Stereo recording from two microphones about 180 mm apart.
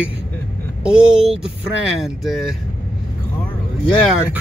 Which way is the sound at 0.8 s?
5° right (ahead or behind).